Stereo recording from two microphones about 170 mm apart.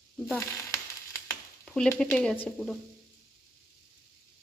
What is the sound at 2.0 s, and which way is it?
Speech, 5° left (ahead or behind).